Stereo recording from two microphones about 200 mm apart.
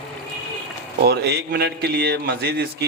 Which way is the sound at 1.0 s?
55° right (ahead or behind).